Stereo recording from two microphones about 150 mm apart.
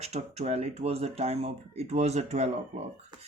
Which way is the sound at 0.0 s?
45° right (ahead or behind).